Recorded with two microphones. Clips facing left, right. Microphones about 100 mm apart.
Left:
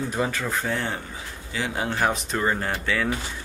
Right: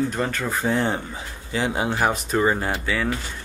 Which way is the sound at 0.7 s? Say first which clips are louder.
Right 5 dB; 25° right (ahead or behind).